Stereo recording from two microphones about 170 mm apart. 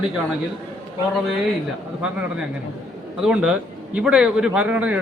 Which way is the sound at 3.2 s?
5° right (ahead or behind).